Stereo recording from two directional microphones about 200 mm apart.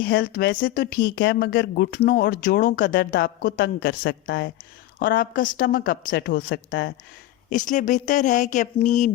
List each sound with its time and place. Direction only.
0.0 s speech: 50° left (ahead or behind)
4.9 s a woman's voice: 45° left (ahead or behind); by 6.9 s 65° left (ahead or behind)
7.5 s speech: 40° left (ahead or behind)